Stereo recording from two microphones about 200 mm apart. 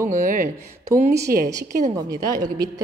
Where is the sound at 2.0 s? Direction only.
20° right (ahead or behind).